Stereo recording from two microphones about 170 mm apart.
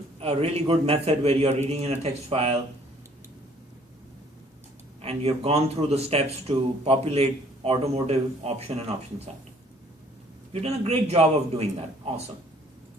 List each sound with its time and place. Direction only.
0.2 s speech: 35° right (ahead or behind)
5.0 s speech: 35° right (ahead or behind)
10.5 s speech: 40° right (ahead or behind)